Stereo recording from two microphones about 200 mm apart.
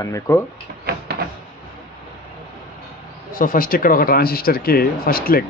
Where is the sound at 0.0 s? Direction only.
15° left (ahead or behind).